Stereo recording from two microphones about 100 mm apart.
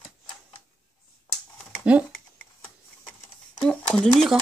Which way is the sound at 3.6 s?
5° left (ahead or behind).